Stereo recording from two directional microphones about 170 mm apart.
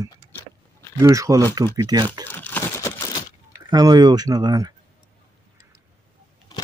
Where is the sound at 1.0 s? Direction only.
20° right (ahead or behind).